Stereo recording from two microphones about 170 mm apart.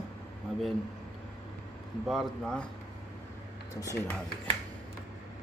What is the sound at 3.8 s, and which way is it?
Speech, 20° left (ahead or behind).